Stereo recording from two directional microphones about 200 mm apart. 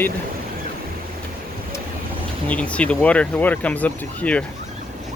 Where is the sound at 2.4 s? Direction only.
5° left (ahead or behind).